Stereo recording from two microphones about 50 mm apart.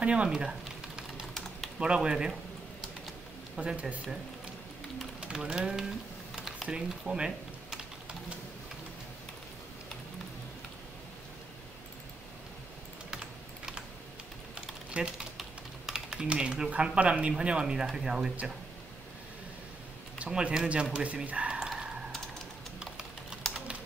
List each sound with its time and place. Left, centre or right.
0.0 s speech: right
0.3 s sizzle: centre
1.8 s speech: centre
3.5 s speech: right
5.2 s speech: centre
6.3 s typing: centre
6.7 s speech: centre
14.9 s speech: centre
20.2 s a sound: right
20.6 s speech: right
21.5 s computer keyboard: centre
22.8 s a sound: centre